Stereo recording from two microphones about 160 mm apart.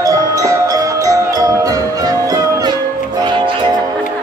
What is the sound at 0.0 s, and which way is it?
Music, 20° right (ahead or behind).